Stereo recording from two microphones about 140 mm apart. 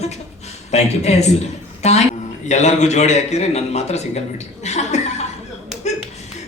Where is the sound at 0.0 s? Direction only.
50° left (ahead or behind).